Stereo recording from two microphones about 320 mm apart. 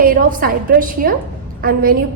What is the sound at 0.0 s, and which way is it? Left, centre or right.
A woman's voice, right.